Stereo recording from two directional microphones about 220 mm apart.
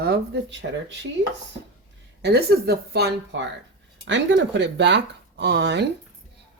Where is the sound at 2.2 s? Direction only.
50° right (ahead or behind).